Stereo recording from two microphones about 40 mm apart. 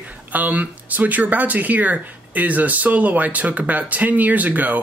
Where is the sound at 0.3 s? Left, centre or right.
Right.